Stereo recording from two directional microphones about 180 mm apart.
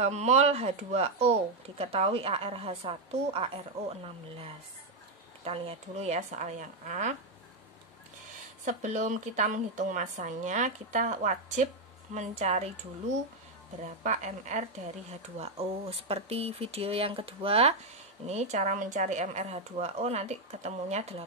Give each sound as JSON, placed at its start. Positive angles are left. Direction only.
{"t": 0.0, "sound": "speech", "side_deg": -40}
{"t": 5.4, "sound": "speech", "side_deg": -35}
{"t": 8.6, "sound": "speech", "side_deg": -40}
{"t": 14.0, "sound": "speech", "side_deg": -40}